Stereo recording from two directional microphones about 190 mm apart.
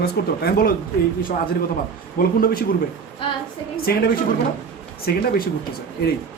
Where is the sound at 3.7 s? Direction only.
55° left (ahead or behind).